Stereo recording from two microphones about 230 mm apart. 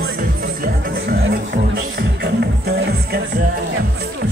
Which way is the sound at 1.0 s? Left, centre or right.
Right.